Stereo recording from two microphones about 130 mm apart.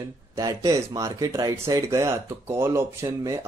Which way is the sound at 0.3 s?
30° right (ahead or behind).